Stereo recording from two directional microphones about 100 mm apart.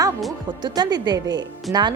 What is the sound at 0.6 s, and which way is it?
Speech, 45° right (ahead or behind).